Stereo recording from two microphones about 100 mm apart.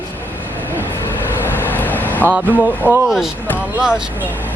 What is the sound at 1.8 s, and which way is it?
Vehicle, 15° left (ahead or behind).